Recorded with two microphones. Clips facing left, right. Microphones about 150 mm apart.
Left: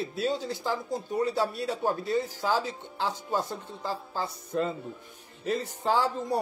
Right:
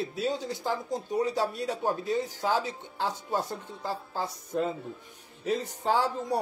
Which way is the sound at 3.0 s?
10° right (ahead or behind).